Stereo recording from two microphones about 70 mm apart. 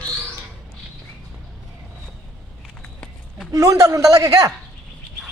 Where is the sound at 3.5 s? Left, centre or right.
Right.